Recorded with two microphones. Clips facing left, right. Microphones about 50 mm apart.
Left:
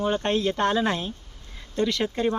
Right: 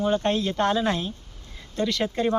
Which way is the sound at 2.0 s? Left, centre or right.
Centre.